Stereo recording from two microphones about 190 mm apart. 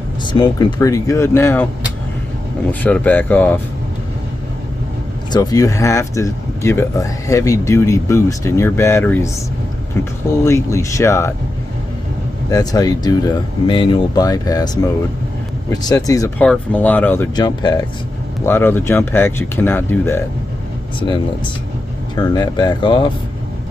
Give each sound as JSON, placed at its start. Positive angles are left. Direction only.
{"t": 0.2, "sound": "speech", "side_deg": 25}
{"t": 2.7, "sound": "speech", "side_deg": 10}
{"t": 5.3, "sound": "speech", "side_deg": 20}
{"t": 10.4, "sound": "speech", "side_deg": 15}
{"t": 12.4, "sound": "speech", "side_deg": 20}
{"t": 16.3, "sound": "speech", "side_deg": 5}
{"t": 17.4, "sound": "speech", "side_deg": 20}
{"t": 18.4, "sound": "speech", "side_deg": 10}
{"t": 22.1, "sound": "speech", "side_deg": 20}